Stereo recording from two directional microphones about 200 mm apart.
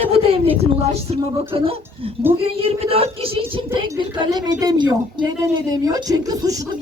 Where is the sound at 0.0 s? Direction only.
30° right (ahead or behind).